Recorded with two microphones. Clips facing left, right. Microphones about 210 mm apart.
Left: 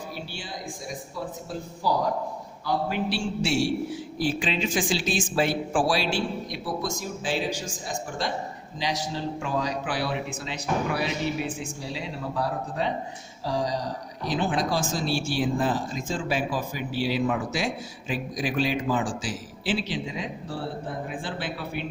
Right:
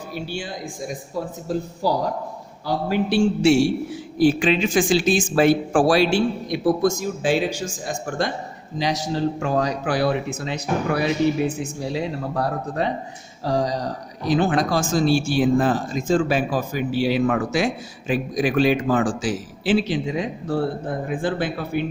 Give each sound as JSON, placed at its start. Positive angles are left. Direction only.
{"t": 1.1, "sound": "speech", "side_deg": -40}
{"t": 8.8, "sound": "speech", "side_deg": -45}